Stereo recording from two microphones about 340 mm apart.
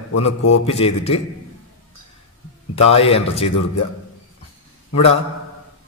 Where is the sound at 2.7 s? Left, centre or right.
Centre.